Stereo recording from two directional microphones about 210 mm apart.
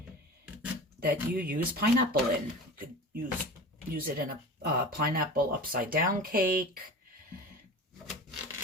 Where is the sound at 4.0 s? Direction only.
45° right (ahead or behind).